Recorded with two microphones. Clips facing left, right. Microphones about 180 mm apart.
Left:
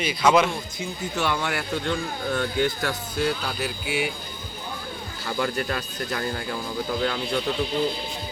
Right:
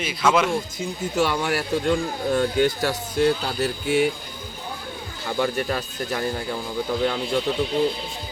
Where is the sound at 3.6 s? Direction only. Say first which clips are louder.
Right 6 dB; 45° right (ahead or behind).